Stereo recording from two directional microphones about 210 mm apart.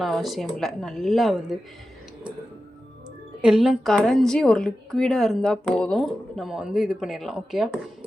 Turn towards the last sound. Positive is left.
turn(degrees=0)  # may be behind; listen again after turning